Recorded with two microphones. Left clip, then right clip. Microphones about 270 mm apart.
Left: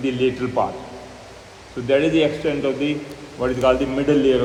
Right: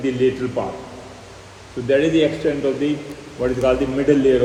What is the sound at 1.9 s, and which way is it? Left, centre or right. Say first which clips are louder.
Speech: right 1 dB; centre.